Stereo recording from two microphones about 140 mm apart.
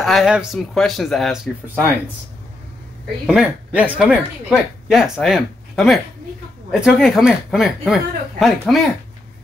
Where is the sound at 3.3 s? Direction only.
10° right (ahead or behind).